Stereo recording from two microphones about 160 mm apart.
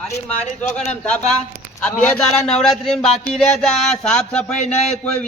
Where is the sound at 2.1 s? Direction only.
5° left (ahead or behind).